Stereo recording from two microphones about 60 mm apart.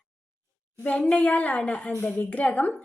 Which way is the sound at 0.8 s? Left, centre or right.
Left.